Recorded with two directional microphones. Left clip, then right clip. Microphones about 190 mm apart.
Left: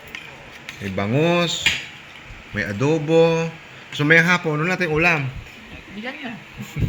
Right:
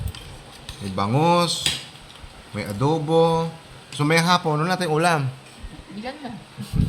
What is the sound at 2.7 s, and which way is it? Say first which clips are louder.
Speech: left 2 dB; 25° left (ahead or behind).